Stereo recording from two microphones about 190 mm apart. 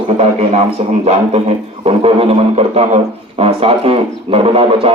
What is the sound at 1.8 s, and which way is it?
Music, 30° right (ahead or behind).